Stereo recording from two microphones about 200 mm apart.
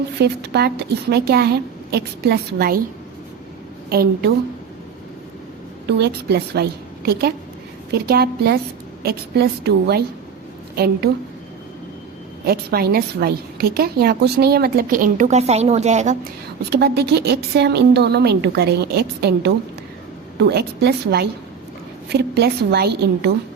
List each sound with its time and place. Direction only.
0.2 s a woman's voice: 55° right (ahead or behind)
3.8 s a woman's voice: 50° right (ahead or behind)
6.0 s a woman's voice: 55° right (ahead or behind)
12.5 s a woman's voice: 50° right (ahead or behind); by 16.1 s 35° right (ahead or behind)
16.6 s a woman's voice: 55° right (ahead or behind)